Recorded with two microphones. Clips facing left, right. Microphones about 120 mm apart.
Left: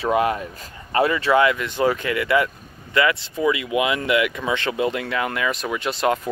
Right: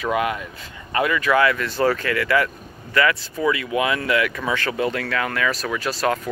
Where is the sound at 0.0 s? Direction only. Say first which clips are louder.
Left 2 dB; 30° left (ahead or behind).